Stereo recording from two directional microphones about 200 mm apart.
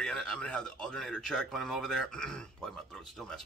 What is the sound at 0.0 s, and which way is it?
Speech, 5° left (ahead or behind).